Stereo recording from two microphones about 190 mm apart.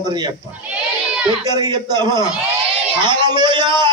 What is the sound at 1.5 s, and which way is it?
Music, 20° right (ahead or behind).